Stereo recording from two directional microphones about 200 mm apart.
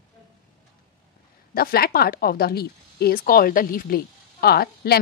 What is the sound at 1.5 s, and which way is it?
Speech, 50° left (ahead or behind).